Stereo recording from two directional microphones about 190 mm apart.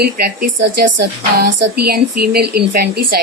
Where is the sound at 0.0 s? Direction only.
55° right (ahead or behind).